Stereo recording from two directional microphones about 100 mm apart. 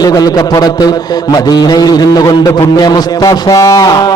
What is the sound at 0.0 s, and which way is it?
A man's voice, 40° left (ahead or behind).